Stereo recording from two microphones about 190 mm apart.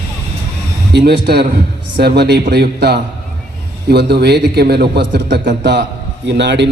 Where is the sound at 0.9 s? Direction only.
60° right (ahead or behind).